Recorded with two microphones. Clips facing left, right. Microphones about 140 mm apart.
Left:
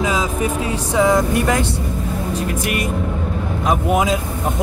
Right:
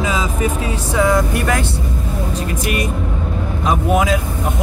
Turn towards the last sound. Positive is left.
turn(degrees=20)  # may be behind; listen again after turning